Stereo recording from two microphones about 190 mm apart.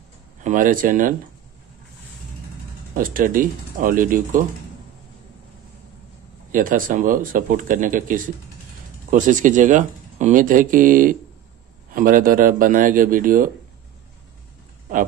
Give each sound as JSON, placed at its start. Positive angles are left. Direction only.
{"t": 0.4, "sound": "speech", "side_deg": -45}
{"t": 2.9, "sound": "speech", "side_deg": -45}
{"t": 6.5, "sound": "speech", "side_deg": -45}